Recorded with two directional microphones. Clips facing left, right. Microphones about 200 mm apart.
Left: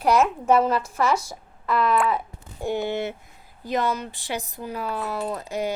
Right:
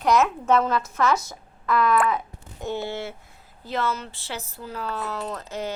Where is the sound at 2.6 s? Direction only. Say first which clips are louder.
Left 4 dB; 15° left (ahead or behind).